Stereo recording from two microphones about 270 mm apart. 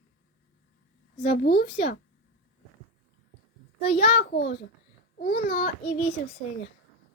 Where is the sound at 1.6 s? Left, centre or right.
Left.